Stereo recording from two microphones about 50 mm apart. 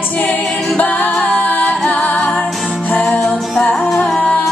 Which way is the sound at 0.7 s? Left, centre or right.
Left.